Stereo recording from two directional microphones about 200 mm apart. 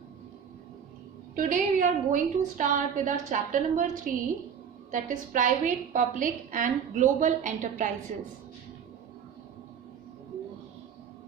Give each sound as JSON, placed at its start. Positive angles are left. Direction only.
{"t": 1.4, "sound": "a woman's voice", "side_deg": -40}